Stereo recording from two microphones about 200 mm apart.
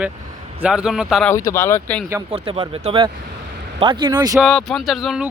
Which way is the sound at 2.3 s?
30° right (ahead or behind).